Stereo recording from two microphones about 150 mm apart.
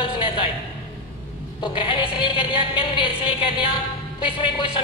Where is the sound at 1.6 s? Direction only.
35° left (ahead or behind).